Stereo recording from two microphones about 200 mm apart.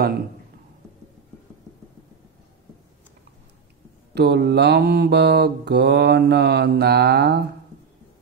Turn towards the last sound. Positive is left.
turn(degrees=-55)  # may be behind; listen again after turning